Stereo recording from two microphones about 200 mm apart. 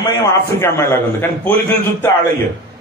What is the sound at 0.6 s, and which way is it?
A man's voice, 15° left (ahead or behind).